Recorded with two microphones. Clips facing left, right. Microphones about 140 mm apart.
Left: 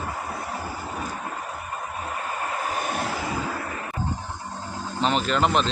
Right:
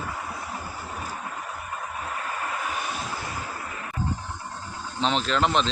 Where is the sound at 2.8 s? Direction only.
55° left (ahead or behind).